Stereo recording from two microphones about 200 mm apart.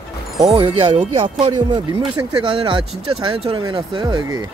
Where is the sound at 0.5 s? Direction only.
30° right (ahead or behind).